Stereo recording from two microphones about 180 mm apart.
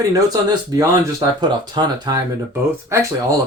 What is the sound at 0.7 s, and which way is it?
Speech, 20° right (ahead or behind).